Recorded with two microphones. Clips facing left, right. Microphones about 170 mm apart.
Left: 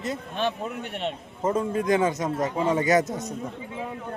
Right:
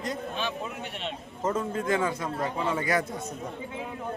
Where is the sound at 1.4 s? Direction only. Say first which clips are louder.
Left 4 dB; 15° left (ahead or behind).